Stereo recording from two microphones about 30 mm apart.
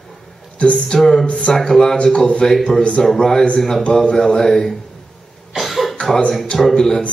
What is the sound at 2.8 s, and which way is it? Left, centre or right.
Speech, left.